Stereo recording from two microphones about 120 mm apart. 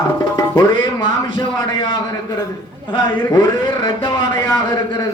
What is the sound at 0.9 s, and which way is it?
A man's voice, 35° left (ahead or behind).